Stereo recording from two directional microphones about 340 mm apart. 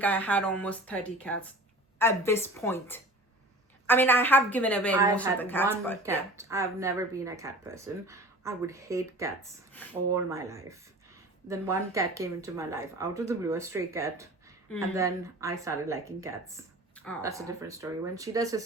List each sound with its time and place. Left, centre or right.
0.0 s a woman's voice: centre
6.0 s speech: centre
16.9 s a sound: centre
17.2 s speech: centre